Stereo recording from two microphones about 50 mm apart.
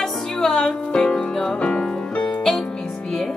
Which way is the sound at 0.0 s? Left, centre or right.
Centre.